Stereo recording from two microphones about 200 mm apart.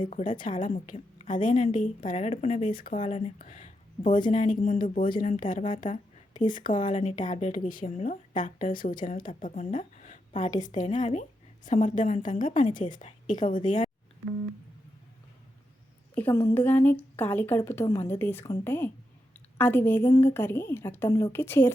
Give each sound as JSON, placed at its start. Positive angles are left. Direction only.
{"t": 0.1, "sound": "a woman's voice", "side_deg": 40}
{"t": 16.1, "sound": "a woman's voice", "side_deg": 10}